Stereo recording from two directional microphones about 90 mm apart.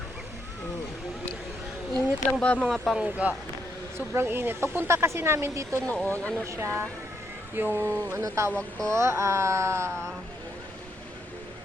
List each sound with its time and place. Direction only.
2.4 s speech: 15° left (ahead or behind)
2.6 s speech: centre (ahead or behind)
3.0 s speech: 15° right (ahead or behind)
3.9 s speech: 30° right (ahead or behind)
5.8 s speech: 10° left (ahead or behind)
6.5 s music: 30° right (ahead or behind)
7.5 s speech: 25° right (ahead or behind)
8.2 s music: 30° right (ahead or behind)
9.9 s speech: 10° left (ahead or behind)